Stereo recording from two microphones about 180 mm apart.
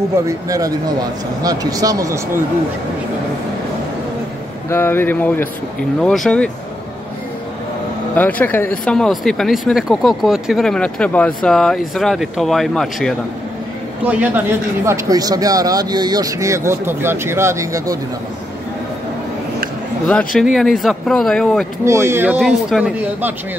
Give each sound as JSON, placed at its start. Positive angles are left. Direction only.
{"t": 0.3, "sound": "speech", "side_deg": -20}
{"t": 4.6, "sound": "speech", "side_deg": 10}
{"t": 8.1, "sound": "speech", "side_deg": 10}
{"t": 14.0, "sound": "speech", "side_deg": -10}
{"t": 14.9, "sound": "speech", "side_deg": -20}
{"t": 20.1, "sound": "speech", "side_deg": 5}
{"t": 21.8, "sound": "speech", "side_deg": -15}